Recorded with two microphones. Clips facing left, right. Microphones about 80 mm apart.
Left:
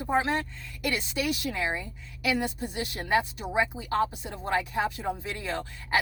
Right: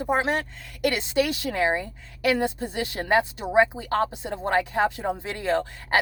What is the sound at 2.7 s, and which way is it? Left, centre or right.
Speech, right.